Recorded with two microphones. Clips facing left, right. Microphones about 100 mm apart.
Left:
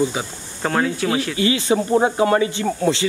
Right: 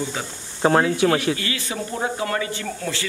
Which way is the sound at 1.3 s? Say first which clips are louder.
Left 10 dB; 20° left (ahead or behind).